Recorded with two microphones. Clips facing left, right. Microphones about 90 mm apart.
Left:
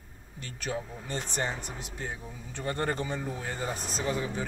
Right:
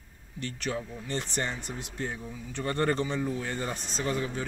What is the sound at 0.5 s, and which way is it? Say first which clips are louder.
Speech: right 1 dB; 15° left (ahead or behind).